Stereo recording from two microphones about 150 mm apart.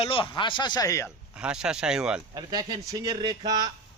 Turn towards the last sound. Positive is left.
turn(degrees=-30)  # may be behind; listen again after turning